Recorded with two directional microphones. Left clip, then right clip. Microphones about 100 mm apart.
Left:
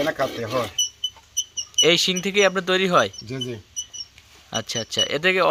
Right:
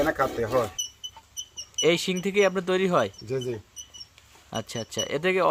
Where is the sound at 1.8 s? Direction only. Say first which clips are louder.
Left 6 dB; 10° right (ahead or behind).